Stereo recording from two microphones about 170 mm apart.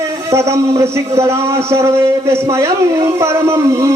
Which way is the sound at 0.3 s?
15° right (ahead or behind).